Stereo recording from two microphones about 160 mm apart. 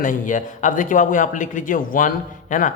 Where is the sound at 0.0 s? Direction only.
55° left (ahead or behind).